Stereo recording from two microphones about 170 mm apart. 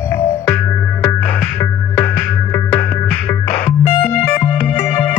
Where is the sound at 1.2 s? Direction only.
15° left (ahead or behind).